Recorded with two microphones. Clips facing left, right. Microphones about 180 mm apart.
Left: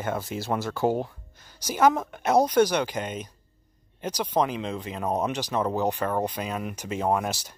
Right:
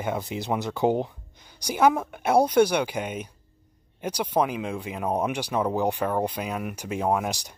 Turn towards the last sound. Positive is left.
turn(degrees=-15)  # may be behind; listen again after turning